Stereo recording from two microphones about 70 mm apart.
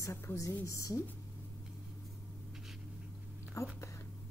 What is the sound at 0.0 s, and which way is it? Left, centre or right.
A woman's voice, left.